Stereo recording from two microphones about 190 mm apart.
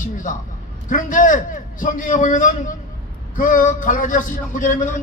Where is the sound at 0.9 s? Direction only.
45° left (ahead or behind).